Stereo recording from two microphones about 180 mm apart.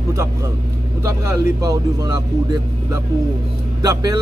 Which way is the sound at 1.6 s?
20° right (ahead or behind).